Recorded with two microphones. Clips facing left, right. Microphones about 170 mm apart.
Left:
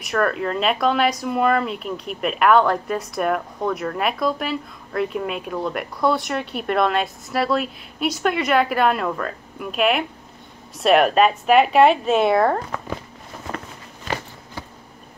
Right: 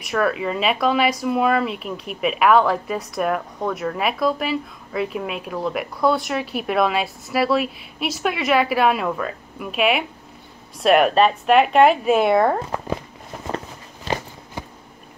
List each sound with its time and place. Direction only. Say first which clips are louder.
0.0 s speech: even; centre (ahead or behind)
14.0 s walk: right 2 dB; 20° right (ahead or behind)